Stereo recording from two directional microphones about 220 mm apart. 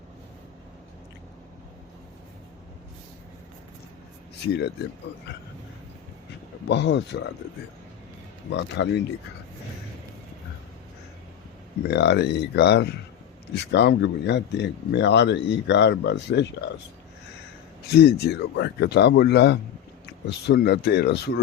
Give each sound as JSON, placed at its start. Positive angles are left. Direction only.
{"t": 6.7, "sound": "speech", "side_deg": 50}
{"t": 8.4, "sound": "speech", "side_deg": 55}
{"t": 11.9, "sound": "speech", "side_deg": 50}
{"t": 17.9, "sound": "speech", "side_deg": 45}